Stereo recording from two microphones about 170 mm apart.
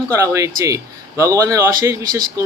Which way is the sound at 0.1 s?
20° right (ahead or behind).